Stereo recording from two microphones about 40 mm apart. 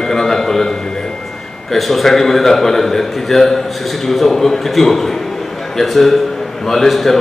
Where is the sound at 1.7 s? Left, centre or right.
Centre.